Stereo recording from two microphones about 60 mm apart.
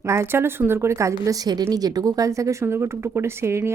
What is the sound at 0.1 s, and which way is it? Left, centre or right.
A woman's voice, right.